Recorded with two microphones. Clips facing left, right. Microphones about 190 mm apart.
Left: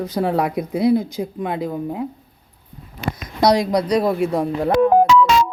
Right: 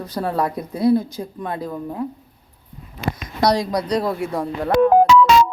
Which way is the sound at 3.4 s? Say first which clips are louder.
Left 3 dB; 15° left (ahead or behind).